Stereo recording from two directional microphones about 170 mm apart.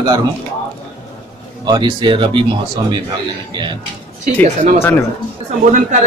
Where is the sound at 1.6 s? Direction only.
25° right (ahead or behind).